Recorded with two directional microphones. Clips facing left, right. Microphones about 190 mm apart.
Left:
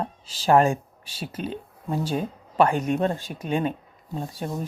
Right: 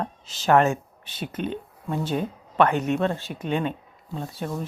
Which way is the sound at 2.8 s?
15° left (ahead or behind).